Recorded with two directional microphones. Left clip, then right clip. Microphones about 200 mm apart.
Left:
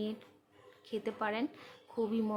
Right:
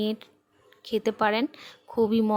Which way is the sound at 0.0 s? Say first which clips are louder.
Right 10 dB; 45° right (ahead or behind).